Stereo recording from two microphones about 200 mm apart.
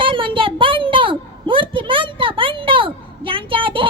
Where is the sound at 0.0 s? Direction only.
25° right (ahead or behind).